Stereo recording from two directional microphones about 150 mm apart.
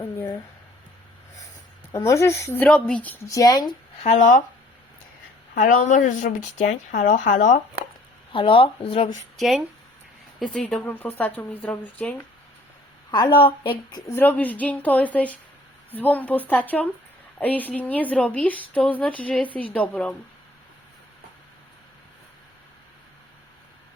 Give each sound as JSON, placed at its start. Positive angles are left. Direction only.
{"t": 1.9, "sound": "speech", "side_deg": 20}
{"t": 3.2, "sound": "speech", "side_deg": 25}
{"t": 4.0, "sound": "speech", "side_deg": 55}
{"t": 5.5, "sound": "speech", "side_deg": 60}
{"t": 8.3, "sound": "speech", "side_deg": 35}
{"t": 9.4, "sound": "speech", "side_deg": 0}
{"t": 13.1, "sound": "a woman's voice", "side_deg": 25}
{"t": 14.1, "sound": "speech", "side_deg": 10}